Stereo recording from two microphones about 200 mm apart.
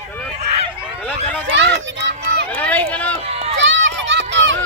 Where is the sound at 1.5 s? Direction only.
60° right (ahead or behind).